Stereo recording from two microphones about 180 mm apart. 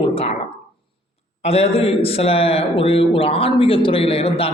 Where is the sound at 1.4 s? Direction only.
35° left (ahead or behind).